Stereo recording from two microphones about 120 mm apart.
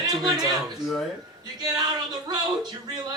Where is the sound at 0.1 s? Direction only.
35° right (ahead or behind).